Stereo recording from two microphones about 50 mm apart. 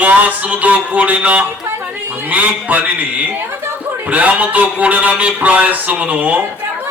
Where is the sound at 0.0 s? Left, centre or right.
Right.